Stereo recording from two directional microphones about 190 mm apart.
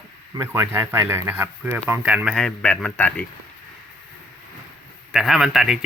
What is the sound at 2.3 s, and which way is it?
Speech, 5° left (ahead or behind).